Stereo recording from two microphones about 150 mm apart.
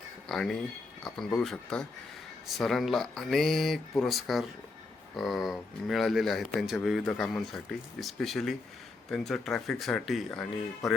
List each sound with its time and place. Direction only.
0.3 s speech: centre (ahead or behind)